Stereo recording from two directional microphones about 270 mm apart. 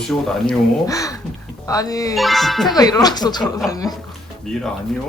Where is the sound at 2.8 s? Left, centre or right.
Centre.